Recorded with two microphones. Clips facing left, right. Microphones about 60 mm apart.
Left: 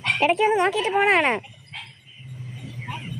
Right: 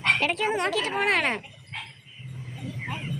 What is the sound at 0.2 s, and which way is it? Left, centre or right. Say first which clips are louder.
Speech: left 6 dB; centre.